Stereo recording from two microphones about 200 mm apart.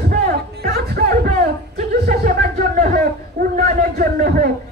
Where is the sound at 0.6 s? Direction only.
50° right (ahead or behind).